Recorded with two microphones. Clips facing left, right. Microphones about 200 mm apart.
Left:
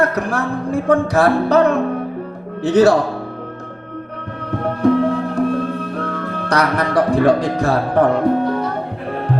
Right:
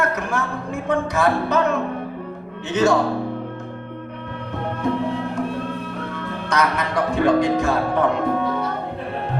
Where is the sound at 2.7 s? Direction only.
35° left (ahead or behind).